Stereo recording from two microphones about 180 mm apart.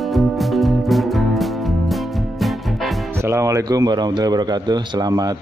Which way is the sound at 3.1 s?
15° right (ahead or behind).